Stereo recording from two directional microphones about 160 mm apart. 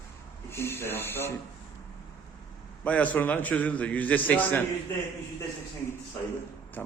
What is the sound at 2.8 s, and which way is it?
A man's voice, 10° left (ahead or behind).